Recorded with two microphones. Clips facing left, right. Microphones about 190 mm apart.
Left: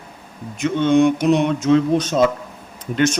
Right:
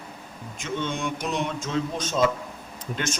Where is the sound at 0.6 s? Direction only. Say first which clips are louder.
Left 14 dB; 65° left (ahead or behind).